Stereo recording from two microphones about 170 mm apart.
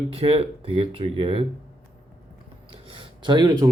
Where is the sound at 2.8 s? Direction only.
30° right (ahead or behind).